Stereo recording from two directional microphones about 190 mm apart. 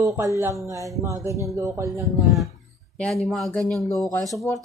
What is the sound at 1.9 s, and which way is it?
Speech, centre (ahead or behind).